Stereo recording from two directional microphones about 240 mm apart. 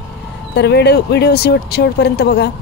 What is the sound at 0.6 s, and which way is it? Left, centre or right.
A woman's voice, left.